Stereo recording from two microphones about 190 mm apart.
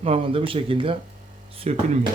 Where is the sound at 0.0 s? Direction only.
30° right (ahead or behind).